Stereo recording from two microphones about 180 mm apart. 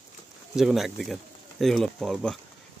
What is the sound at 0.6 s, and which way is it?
Speech, centre (ahead or behind).